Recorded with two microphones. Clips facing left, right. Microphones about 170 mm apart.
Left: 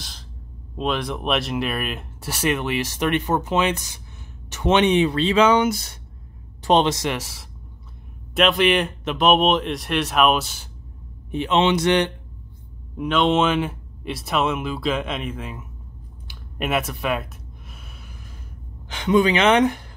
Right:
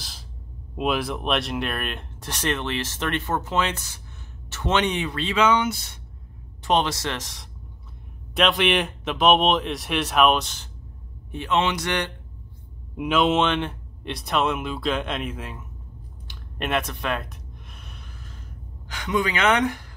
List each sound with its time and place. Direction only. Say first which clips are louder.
0.7 s speech: even; 5° right (ahead or behind); by 5.9 s 40° left (ahead or behind)
6.6 s speech: left 4 dB; 25° left (ahead or behind); by 10.7 s 5° left (ahead or behind)
11.3 s speech: left 5 dB; 20° left (ahead or behind)
12.9 s speech: left 1 dB; 5° right (ahead or behind)
18.9 s speech: left 7 dB; 25° left (ahead or behind)